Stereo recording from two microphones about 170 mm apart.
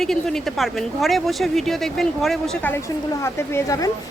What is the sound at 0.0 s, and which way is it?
A woman's voice, 5° left (ahead or behind).